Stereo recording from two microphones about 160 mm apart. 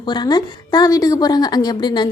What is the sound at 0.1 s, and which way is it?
A woman's voice, 25° left (ahead or behind).